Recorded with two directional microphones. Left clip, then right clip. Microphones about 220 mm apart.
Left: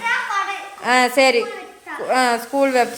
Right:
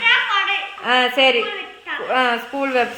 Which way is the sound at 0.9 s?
20° left (ahead or behind).